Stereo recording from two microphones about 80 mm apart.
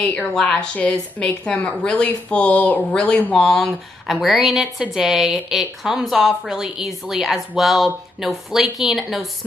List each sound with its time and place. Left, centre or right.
0.3 s speech: centre
3.4 s speech: centre